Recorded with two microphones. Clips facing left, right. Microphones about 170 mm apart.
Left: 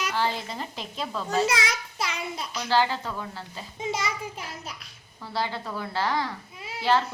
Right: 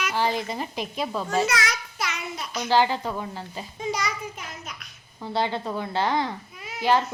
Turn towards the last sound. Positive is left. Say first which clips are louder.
# right 2 dB
turn(degrees=-15)  # may be behind; listen again after turning